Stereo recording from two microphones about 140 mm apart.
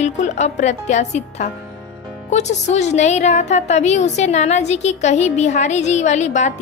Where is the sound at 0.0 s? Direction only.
55° left (ahead or behind).